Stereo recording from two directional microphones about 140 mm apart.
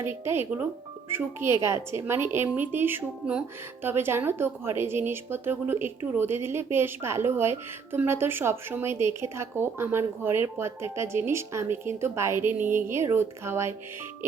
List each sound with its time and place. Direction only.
0.0 s speech: 15° right (ahead or behind)